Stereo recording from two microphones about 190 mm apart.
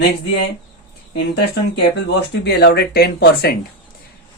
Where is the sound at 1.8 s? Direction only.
65° left (ahead or behind).